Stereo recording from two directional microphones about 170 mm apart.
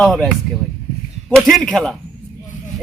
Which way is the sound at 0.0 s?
5° left (ahead or behind).